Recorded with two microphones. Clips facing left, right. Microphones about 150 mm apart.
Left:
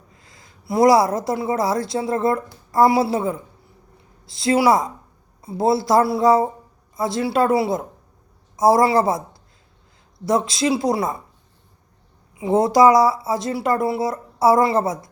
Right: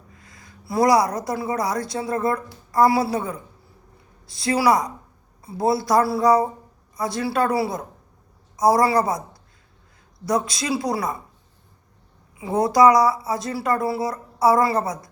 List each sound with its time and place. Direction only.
0.2 s a sound: 25° left (ahead or behind)
0.7 s a woman's voice: 25° left (ahead or behind)
10.2 s a woman's voice: 25° left (ahead or behind)
12.4 s a woman's voice: 25° left (ahead or behind)